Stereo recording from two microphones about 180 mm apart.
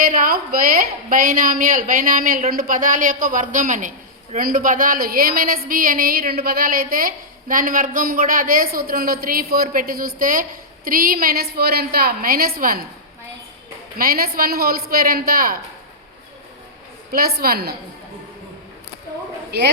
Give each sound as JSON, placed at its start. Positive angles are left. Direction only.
{"t": 0.0, "sound": "a woman's voice", "side_deg": -50}
{"t": 14.0, "sound": "a woman's voice", "side_deg": -55}
{"t": 17.1, "sound": "a woman's voice", "side_deg": -60}
{"t": 19.5, "sound": "a man's voice", "side_deg": -70}